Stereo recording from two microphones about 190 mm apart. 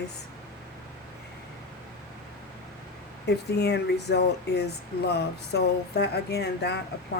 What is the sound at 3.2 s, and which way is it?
Speech, 60° left (ahead or behind).